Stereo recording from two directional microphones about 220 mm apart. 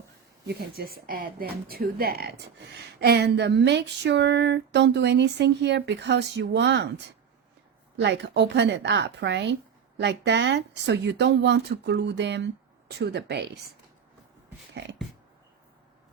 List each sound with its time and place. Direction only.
0.4 s speech: 45° right (ahead or behind)